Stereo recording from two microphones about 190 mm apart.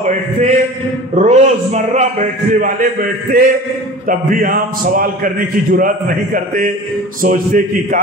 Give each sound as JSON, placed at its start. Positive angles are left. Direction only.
{"t": 0.0, "sound": "a man's voice", "side_deg": -40}